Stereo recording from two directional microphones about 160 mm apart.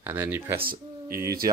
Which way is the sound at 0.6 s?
65° right (ahead or behind).